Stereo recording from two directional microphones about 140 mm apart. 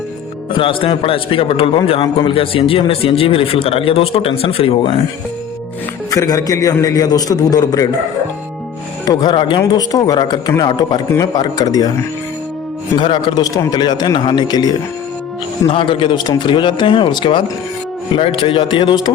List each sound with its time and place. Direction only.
0.5 s a man's voice: 40° left (ahead or behind)
6.1 s a man's voice: 25° left (ahead or behind)
9.0 s a man's voice: 30° left (ahead or behind)
13.0 s a man's voice: 35° left (ahead or behind)